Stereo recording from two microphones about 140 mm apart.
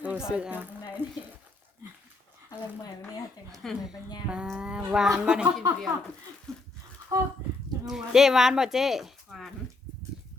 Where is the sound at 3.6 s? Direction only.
5° right (ahead or behind).